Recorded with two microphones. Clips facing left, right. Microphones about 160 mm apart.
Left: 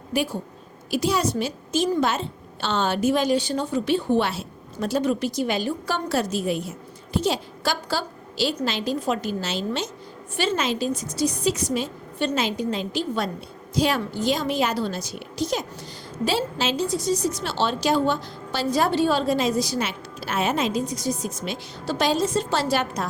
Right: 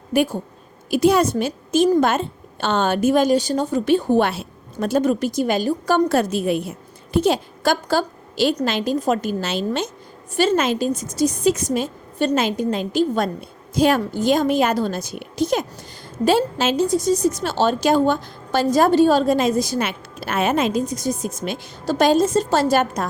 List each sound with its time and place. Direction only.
0.1 s a woman's voice: 55° right (ahead or behind)